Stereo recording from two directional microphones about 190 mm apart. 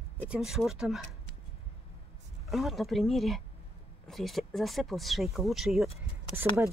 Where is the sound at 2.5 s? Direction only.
Centre (ahead or behind).